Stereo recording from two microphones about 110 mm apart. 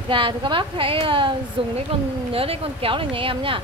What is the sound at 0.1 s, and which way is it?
Speech, 50° right (ahead or behind).